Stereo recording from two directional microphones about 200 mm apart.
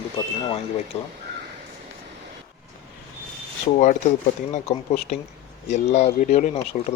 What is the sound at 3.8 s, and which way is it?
Speech, 35° left (ahead or behind).